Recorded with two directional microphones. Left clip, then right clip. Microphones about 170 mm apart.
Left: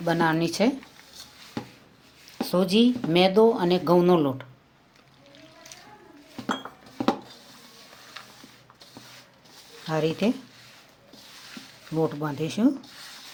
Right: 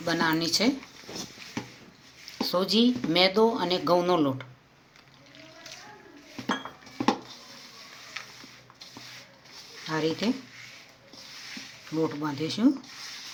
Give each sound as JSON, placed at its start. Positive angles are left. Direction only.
{"t": 0.0, "sound": "speech", "side_deg": 50}
{"t": 2.4, "sound": "speech", "side_deg": 60}
{"t": 9.9, "sound": "speech", "side_deg": 60}
{"t": 11.9, "sound": "speech", "side_deg": 55}